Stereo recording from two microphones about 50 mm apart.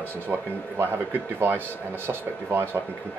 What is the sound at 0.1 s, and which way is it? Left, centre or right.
Speech, right.